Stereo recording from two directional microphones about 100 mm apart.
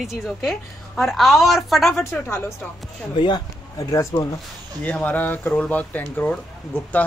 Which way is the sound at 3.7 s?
35° left (ahead or behind).